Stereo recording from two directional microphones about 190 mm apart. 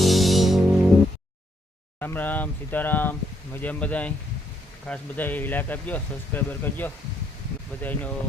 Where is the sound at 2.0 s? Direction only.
10° left (ahead or behind).